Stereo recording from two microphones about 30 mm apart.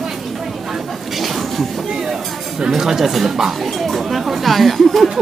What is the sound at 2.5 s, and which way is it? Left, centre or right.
Speech, right.